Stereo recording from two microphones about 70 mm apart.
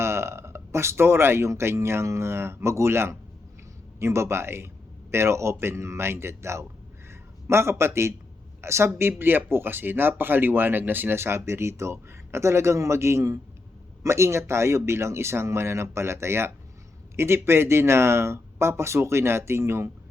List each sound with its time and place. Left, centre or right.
0.0 s a man's voice: right